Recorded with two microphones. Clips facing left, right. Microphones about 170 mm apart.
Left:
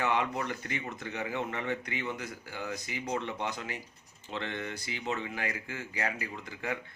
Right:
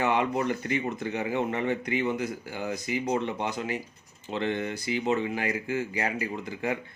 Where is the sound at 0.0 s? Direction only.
20° right (ahead or behind).